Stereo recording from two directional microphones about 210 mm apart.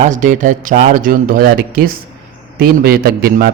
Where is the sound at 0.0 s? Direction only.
35° right (ahead or behind).